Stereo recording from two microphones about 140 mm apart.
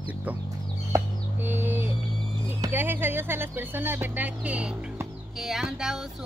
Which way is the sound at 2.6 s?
15° right (ahead or behind).